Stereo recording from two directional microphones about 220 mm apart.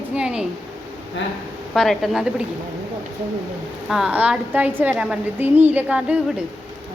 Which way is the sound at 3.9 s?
5° right (ahead or behind).